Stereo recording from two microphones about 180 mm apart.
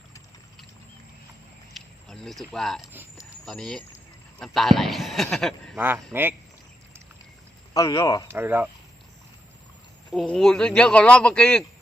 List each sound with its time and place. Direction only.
1.7 s speech: centre (ahead or behind)
2.9 s speech: 10° right (ahead or behind)
3.4 s speech: centre (ahead or behind)
5.7 s speech: 10° right (ahead or behind)
7.7 s speech: 20° left (ahead or behind)
8.3 s speech: 10° right (ahead or behind)
10.1 s speech: centre (ahead or behind)